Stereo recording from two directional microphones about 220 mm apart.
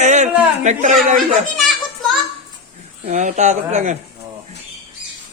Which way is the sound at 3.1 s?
35° right (ahead or behind).